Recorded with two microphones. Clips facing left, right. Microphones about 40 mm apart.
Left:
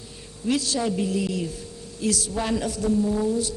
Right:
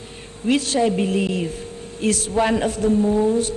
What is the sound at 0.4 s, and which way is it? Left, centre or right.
Speech, right.